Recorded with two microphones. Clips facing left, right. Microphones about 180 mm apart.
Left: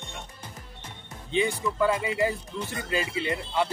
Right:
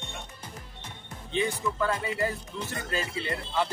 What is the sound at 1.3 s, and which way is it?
Speech, 10° left (ahead or behind).